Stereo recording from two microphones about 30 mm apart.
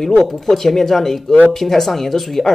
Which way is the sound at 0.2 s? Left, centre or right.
Centre.